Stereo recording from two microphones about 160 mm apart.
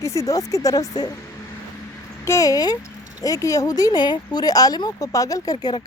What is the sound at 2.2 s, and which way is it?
Speech, 20° left (ahead or behind).